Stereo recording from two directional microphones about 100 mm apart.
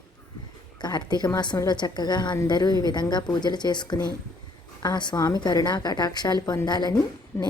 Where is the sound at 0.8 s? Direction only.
45° left (ahead or behind).